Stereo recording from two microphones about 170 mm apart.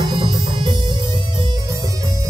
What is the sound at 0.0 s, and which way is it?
Music, 25° right (ahead or behind).